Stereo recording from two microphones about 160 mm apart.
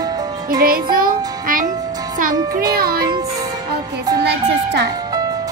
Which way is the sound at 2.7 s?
70° right (ahead or behind).